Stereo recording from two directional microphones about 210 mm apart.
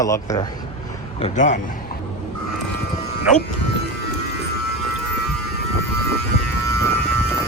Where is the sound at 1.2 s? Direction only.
35° left (ahead or behind).